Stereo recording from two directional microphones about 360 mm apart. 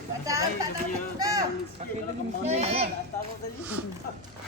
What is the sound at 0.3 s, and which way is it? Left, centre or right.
A child's voice, centre.